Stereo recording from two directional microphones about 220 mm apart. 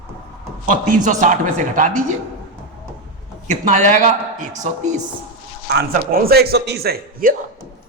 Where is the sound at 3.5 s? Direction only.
35° right (ahead or behind).